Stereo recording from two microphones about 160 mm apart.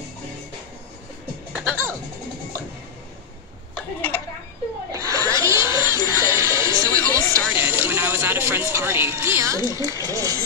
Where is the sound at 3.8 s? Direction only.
10° left (ahead or behind).